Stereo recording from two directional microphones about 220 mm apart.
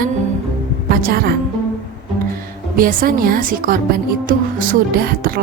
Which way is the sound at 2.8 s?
40° right (ahead or behind).